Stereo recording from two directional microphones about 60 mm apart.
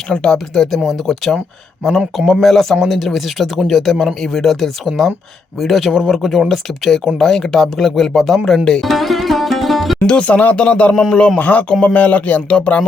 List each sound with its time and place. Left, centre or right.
0.1 s speech: centre
8.8 s music: centre
10.1 s speech: left